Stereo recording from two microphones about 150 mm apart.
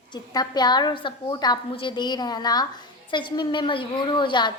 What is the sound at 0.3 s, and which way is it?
A woman's voice, 30° left (ahead or behind).